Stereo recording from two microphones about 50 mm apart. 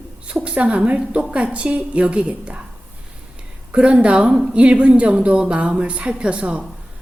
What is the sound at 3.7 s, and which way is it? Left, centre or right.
A woman's voice, right.